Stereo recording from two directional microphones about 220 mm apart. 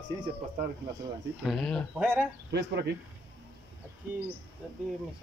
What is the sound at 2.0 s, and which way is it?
Speech, 5° right (ahead or behind).